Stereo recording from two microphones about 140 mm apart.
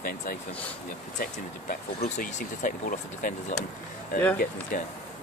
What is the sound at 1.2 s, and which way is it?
Speech, 85° left.